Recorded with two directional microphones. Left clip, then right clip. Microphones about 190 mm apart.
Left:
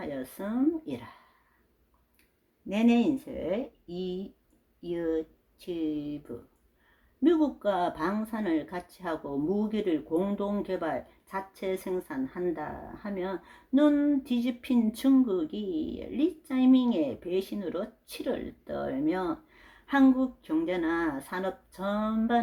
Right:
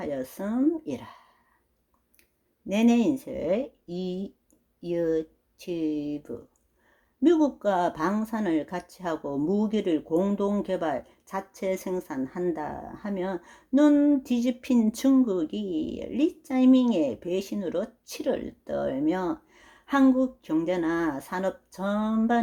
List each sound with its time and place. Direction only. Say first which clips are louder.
0.0 s speech: right 4 dB; 40° right (ahead or behind)
2.6 s speech: right 2 dB; 30° right (ahead or behind)